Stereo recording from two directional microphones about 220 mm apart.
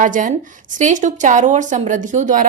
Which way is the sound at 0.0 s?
35° right (ahead or behind).